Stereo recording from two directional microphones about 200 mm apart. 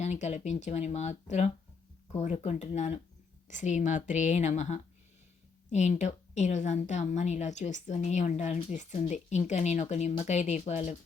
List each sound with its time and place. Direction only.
0.0 s a woman's voice: 35° left (ahead or behind)